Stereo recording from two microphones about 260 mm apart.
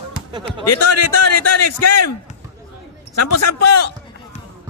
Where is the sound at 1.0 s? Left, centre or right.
Left.